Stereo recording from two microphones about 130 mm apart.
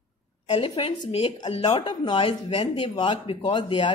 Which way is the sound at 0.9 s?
35° left (ahead or behind).